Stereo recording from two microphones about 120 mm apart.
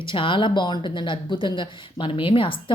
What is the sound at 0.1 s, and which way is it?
Speech, 45° left (ahead or behind).